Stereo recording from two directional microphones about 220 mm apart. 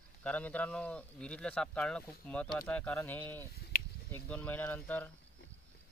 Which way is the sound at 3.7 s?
40° left (ahead or behind).